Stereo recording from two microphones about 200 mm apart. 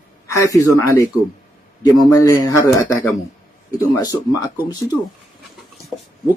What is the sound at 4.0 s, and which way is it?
Speech, 20° left (ahead or behind).